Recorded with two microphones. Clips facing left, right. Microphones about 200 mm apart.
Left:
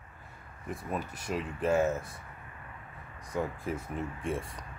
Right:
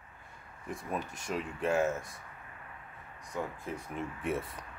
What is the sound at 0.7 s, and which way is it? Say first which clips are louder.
Speech: left 1 dB; 5° left (ahead or behind).